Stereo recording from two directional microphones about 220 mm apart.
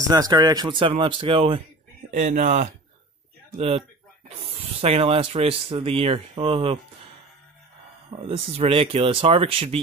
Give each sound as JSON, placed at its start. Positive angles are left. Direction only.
{"t": 0.1, "sound": "speech", "side_deg": -15}
{"t": 4.8, "sound": "speech", "side_deg": -25}
{"t": 8.5, "sound": "speech", "side_deg": -25}